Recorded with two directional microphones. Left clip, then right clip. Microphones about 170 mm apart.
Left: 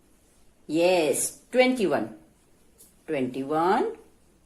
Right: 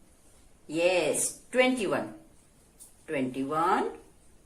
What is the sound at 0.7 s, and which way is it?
A woman's voice, 75° left (ahead or behind).